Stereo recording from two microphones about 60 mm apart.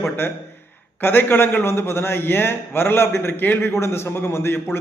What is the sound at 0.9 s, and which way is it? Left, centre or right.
A man's voice, left.